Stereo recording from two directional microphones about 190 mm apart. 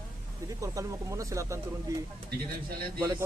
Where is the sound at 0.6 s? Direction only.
15° right (ahead or behind).